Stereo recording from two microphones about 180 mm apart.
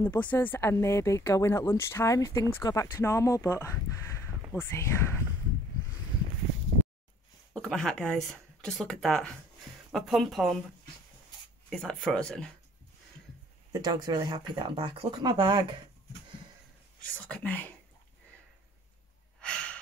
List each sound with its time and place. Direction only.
0.0 s speech: 10° left (ahead or behind)
7.5 s speech: 5° left (ahead or behind)
11.7 s speech: centre (ahead or behind)
13.7 s speech: 20° right (ahead or behind)
17.0 s speech: 10° left (ahead or behind)
19.4 s sigh: 5° left (ahead or behind)